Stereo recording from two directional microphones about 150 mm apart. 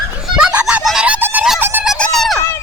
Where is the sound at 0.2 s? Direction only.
5° right (ahead or behind).